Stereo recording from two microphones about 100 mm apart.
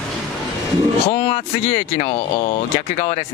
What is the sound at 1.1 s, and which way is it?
Speech, 75° left (ahead or behind).